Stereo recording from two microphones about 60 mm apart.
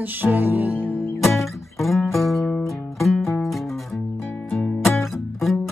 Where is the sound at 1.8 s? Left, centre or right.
Centre.